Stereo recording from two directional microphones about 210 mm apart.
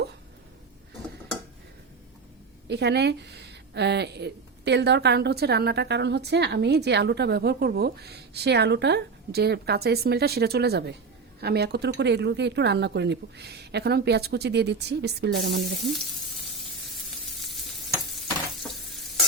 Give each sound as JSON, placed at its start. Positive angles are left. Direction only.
{"t": 2.6, "sound": "speech", "side_deg": -55}